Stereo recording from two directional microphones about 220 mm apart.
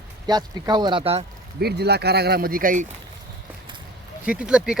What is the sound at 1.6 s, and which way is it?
Speech, 50° right (ahead or behind).